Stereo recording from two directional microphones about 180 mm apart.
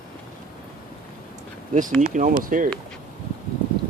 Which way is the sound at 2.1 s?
45° right (ahead or behind).